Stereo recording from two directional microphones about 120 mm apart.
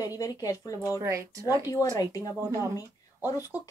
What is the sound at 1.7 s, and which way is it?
Speech, 30° left (ahead or behind).